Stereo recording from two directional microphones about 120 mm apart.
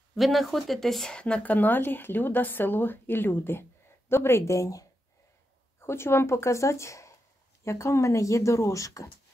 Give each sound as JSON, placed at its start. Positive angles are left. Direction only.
{"t": 0.1, "sound": "speech", "side_deg": 0}